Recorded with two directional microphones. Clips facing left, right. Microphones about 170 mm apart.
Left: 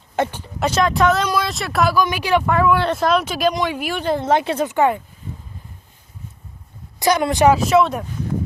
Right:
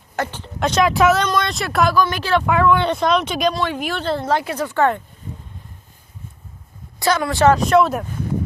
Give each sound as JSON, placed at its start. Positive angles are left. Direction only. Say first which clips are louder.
{"t": 0.2, "sound": "speech", "louder": "left 2 dB", "side_deg": 10}
{"t": 2.0, "sound": "a woman's voice", "louder": "even", "side_deg": 10}
{"t": 2.5, "sound": "a woman's voice", "louder": "right 3 dB", "side_deg": 5}
{"t": 7.0, "sound": "a woman's voice", "louder": "left 1 dB", "side_deg": 20}
{"t": 7.5, "sound": "speech", "louder": "even", "side_deg": 5}